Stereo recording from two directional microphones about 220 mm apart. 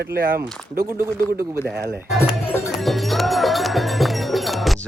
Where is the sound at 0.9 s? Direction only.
10° right (ahead or behind).